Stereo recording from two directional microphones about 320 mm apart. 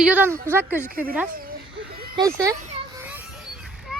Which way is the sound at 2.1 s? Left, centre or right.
Centre.